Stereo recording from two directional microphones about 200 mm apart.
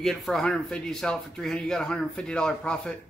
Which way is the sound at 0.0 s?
Centre (ahead or behind).